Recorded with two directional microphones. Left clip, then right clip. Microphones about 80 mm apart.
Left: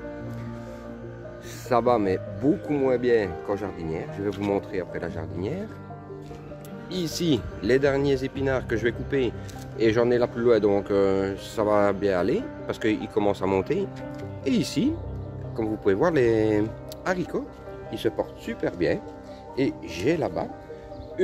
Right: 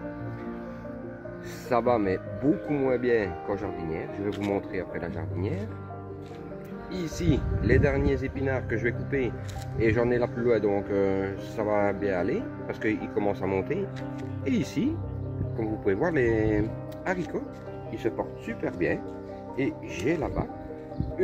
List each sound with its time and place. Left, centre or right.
1.7 s speech: centre
6.9 s speech: left
18.5 s speech: centre
19.5 s speech: left